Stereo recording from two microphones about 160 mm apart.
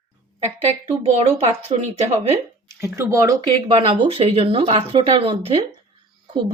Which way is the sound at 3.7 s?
35° right (ahead or behind).